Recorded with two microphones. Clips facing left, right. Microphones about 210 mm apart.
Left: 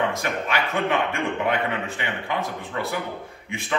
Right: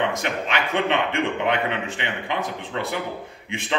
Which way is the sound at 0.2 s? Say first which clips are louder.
Even; 20° right (ahead or behind).